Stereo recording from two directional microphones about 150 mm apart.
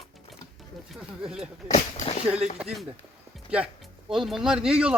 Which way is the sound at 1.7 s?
50° left (ahead or behind).